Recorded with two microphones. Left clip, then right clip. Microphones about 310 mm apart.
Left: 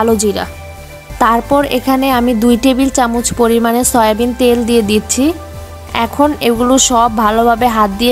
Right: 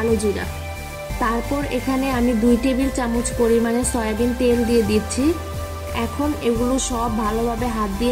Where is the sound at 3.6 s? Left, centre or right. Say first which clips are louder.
Left 11 dB; left.